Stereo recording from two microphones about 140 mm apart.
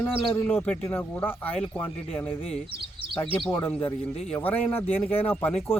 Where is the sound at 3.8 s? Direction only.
45° left (ahead or behind).